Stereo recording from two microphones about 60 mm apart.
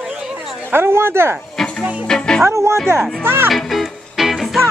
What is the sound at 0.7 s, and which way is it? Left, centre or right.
Speech, right.